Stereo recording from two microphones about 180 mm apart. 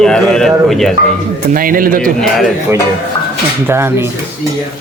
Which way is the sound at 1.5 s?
50° right (ahead or behind).